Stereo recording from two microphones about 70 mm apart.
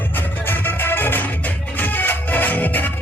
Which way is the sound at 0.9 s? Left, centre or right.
Left.